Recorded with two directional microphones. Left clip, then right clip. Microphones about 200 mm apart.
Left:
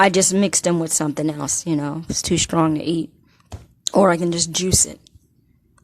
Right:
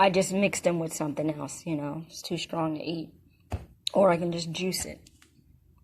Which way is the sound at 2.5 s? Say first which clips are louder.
Left 10 dB; 50° left (ahead or behind).